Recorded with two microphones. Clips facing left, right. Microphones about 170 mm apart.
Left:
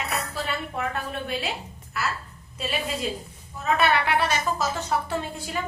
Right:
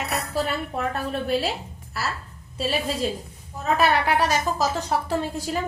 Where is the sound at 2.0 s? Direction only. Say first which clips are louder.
Even; 35° right (ahead or behind).